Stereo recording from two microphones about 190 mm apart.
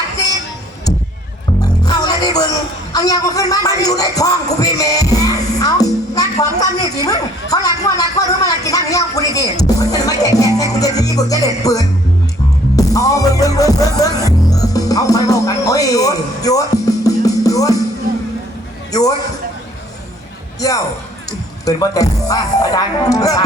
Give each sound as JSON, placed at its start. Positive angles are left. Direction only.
{"t": 1.8, "sound": "music", "side_deg": 20}
{"t": 8.4, "sound": "a sound", "side_deg": 20}
{"t": 12.7, "sound": "music", "side_deg": 20}
{"t": 18.9, "sound": "a man's voice", "side_deg": 20}
{"t": 20.6, "sound": "music", "side_deg": 20}
{"t": 21.6, "sound": "speech", "side_deg": 20}